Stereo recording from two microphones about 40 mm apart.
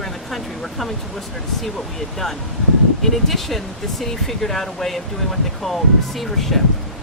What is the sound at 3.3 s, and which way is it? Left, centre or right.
Speech, centre.